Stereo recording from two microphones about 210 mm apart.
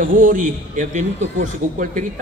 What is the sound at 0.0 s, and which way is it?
A man's voice, 40° right (ahead or behind).